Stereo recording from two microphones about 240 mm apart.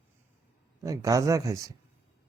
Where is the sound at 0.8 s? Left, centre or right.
Centre.